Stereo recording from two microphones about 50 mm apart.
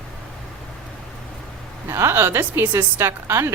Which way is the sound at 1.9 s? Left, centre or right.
Right.